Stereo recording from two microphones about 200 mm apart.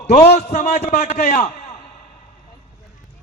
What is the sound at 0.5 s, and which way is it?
A man's voice, 35° left (ahead or behind).